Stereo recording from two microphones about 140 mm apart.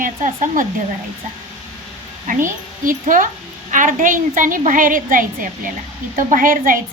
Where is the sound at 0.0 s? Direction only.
70° right (ahead or behind).